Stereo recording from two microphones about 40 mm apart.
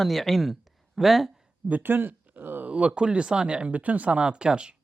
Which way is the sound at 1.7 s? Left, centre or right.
Right.